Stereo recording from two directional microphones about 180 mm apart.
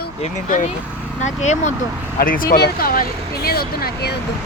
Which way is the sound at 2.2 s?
50° left (ahead or behind).